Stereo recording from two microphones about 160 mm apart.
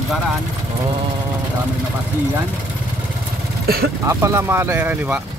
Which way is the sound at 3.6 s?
75° right (ahead or behind).